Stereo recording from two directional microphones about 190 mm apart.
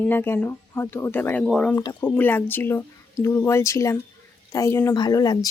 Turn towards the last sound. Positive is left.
turn(degrees=20)  # may be behind; listen again after turning